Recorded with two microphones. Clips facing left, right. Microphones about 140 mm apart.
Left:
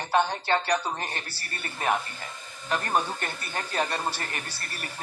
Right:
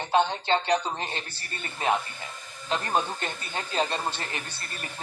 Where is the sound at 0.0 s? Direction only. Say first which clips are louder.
Right 1 dB; 20° right (ahead or behind).